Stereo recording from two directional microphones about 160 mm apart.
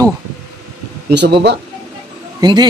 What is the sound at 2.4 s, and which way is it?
Speech, 25° right (ahead or behind).